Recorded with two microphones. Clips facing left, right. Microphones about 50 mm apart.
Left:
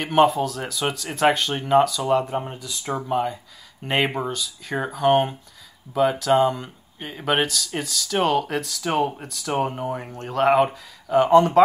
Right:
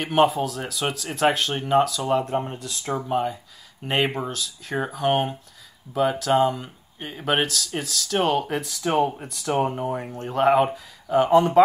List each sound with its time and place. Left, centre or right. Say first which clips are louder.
0.0 s speech: left 2 dB; centre